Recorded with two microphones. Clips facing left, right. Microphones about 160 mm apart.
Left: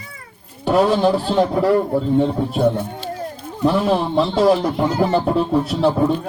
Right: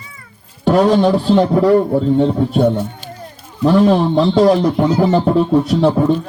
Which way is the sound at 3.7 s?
Centre (ahead or behind).